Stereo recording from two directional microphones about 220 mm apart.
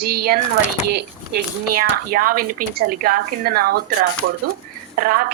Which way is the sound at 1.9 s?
40° right (ahead or behind).